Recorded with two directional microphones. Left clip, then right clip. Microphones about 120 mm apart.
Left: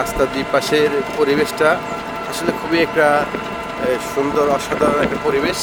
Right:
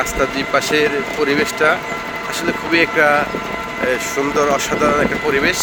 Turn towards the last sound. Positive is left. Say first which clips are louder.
# right 1 dB
turn(degrees=15)  # may be behind; listen again after turning